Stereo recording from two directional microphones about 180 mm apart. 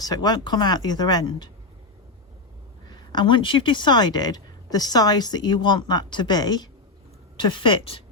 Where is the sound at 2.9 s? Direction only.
25° left (ahead or behind).